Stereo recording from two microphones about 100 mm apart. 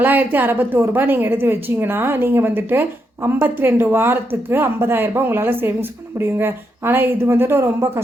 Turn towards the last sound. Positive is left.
turn(degrees=-25)  # may be behind; listen again after turning